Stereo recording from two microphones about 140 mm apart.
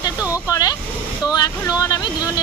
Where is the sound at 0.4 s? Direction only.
25° left (ahead or behind).